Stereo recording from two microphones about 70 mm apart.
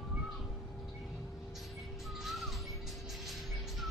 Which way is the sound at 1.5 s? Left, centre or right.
Centre.